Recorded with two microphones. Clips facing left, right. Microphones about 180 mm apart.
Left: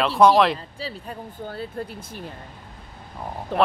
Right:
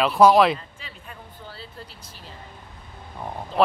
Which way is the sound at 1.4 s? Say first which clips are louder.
Left 11 dB; 50° left (ahead or behind).